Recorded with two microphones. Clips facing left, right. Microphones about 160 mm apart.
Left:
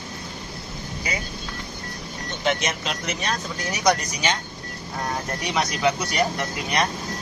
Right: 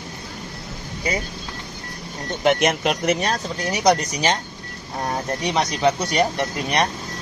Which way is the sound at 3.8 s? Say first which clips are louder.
Right 3 dB; 30° right (ahead or behind).